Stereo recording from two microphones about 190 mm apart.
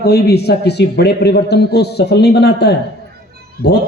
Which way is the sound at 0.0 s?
55° left (ahead or behind).